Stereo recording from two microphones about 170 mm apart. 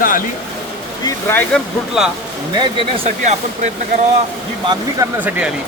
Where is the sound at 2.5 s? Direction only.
25° right (ahead or behind); by 4.0 s 45° right (ahead or behind).